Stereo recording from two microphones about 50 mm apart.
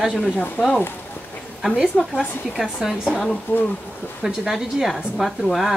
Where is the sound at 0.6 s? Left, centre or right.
Left.